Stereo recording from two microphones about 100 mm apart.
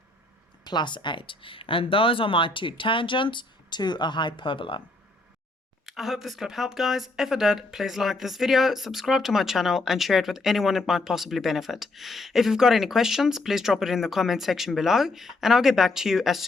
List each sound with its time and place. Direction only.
0.6 s speech: 50° left (ahead or behind)
5.8 s speech: centre (ahead or behind)